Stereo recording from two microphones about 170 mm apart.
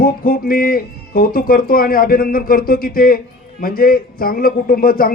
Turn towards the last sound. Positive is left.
turn(degrees=60)  # may be behind; listen again after turning